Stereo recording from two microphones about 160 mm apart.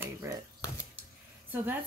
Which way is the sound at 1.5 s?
10° right (ahead or behind).